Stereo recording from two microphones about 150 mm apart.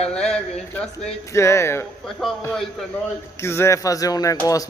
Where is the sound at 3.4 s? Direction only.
20° left (ahead or behind).